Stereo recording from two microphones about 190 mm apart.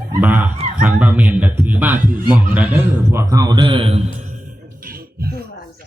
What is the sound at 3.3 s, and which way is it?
Speech, 20° right (ahead or behind).